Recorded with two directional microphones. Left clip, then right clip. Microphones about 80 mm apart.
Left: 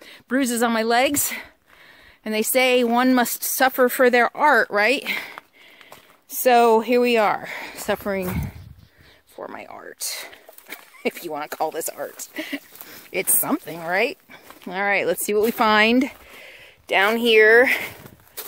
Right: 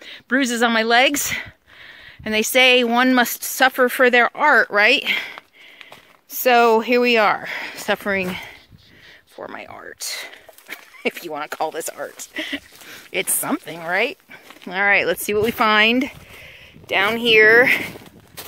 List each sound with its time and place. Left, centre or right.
0.0 s speech: centre; by 4.6 s left
4.6 s speech: left
5.9 s a sound: left
6.6 s speech: left
9.9 s speech: left
13.7 s speech: left
14.7 s speech: centre; by 17.4 s left
17.4 s speech: left